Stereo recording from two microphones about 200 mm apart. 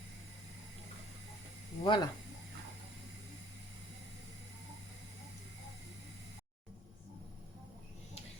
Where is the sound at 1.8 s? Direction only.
20° left (ahead or behind).